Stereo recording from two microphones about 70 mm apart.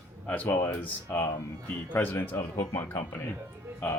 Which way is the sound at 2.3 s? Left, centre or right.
Left.